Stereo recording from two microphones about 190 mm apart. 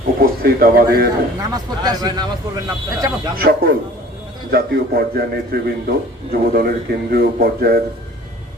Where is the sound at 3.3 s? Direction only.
50° right (ahead or behind).